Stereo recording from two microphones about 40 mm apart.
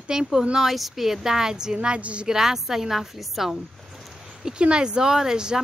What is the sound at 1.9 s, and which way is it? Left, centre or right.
Speech, right.